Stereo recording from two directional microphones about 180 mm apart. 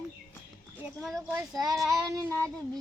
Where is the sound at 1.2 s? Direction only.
15° right (ahead or behind).